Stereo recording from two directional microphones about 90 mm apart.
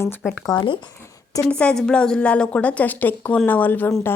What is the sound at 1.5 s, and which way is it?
A woman's voice, 10° left (ahead or behind).